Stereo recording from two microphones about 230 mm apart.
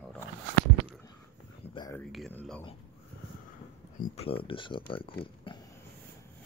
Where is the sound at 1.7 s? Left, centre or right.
Centre.